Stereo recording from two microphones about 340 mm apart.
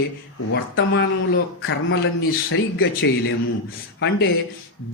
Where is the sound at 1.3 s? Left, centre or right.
Left.